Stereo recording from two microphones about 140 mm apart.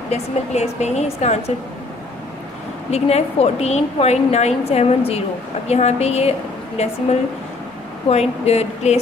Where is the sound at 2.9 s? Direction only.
50° left (ahead or behind).